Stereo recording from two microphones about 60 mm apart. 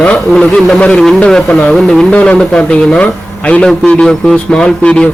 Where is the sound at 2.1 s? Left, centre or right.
Centre.